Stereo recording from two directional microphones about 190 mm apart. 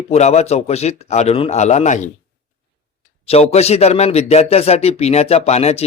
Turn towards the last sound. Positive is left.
turn(degrees=35)  # may be behind; listen again after turning